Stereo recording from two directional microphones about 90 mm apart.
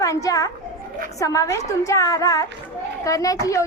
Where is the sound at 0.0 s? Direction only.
40° left (ahead or behind).